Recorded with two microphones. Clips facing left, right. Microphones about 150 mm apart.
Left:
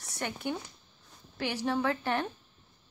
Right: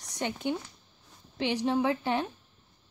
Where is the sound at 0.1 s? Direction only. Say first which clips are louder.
Right 3 dB; 20° right (ahead or behind).